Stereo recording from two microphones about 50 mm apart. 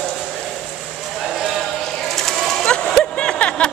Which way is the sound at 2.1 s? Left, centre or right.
Centre.